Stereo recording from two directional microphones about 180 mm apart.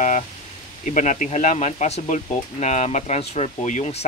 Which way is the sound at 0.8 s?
45° left (ahead or behind).